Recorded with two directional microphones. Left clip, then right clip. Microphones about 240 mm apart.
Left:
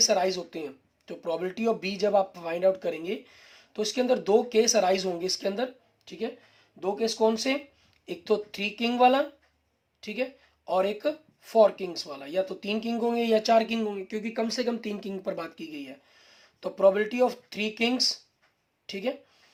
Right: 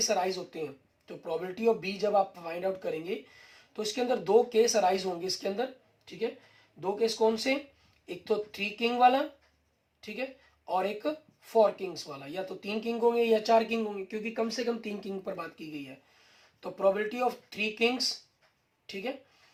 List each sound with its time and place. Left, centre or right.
0.0 s speech: left